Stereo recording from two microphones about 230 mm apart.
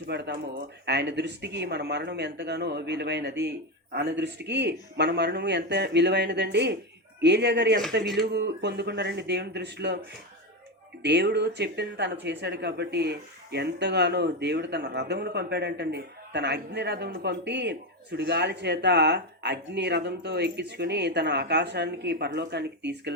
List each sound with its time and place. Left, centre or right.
0.1 s speech: right
11.0 s speech: right